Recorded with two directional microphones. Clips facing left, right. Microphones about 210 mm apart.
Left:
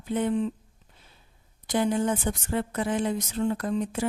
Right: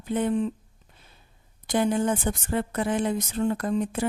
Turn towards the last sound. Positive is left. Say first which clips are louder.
# right 2 dB
turn(degrees=-55)  # may be behind; listen again after turning